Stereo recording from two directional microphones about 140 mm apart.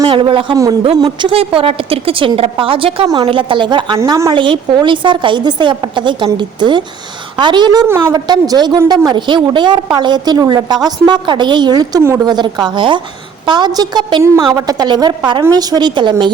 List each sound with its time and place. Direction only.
0.0 s a man's voice: 35° right (ahead or behind)
0.5 s a woman's voice: 25° right (ahead or behind)
1.3 s a woman's voice: 40° right (ahead or behind)
3.9 s a woman's voice: 20° right (ahead or behind)
4.3 s a woman's voice: 35° right (ahead or behind); by 8.1 s 15° right (ahead or behind)
8.1 s a woman's voice: 30° right (ahead or behind)